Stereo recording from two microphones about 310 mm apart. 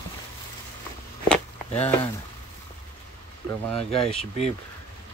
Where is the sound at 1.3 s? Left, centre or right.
Centre.